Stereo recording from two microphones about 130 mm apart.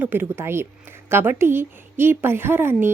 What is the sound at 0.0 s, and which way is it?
A woman's voice, 15° right (ahead or behind).